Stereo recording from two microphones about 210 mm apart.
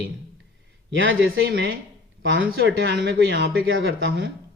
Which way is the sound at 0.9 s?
55° right (ahead or behind).